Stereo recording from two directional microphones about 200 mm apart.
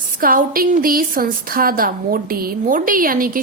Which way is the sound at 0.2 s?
45° right (ahead or behind).